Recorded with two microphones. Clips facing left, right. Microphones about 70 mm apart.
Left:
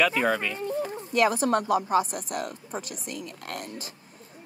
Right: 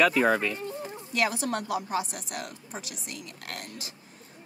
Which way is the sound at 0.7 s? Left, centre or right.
Left.